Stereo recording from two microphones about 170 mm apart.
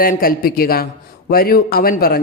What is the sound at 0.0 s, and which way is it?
Speech, 60° left (ahead or behind).